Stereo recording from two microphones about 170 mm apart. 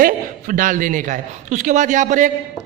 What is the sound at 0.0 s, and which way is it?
A man's voice, 50° right (ahead or behind).